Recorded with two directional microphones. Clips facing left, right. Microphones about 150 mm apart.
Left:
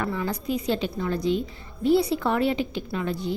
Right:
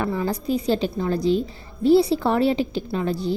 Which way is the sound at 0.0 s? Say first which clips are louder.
Right 4 dB; 30° right (ahead or behind).